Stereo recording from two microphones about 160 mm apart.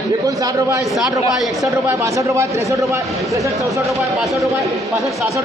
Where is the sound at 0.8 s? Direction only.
Centre (ahead or behind).